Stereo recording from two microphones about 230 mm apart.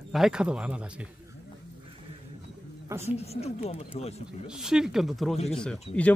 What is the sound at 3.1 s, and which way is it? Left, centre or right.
Speech, left.